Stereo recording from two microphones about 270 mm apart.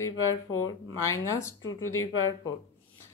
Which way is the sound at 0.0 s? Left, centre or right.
Left.